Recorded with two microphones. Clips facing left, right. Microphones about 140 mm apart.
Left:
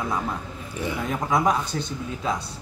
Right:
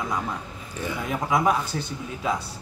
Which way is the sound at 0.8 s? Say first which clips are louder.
Left 2 dB; 15° left (ahead or behind).